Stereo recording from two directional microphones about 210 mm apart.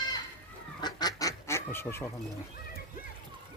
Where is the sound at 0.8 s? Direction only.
20° left (ahead or behind).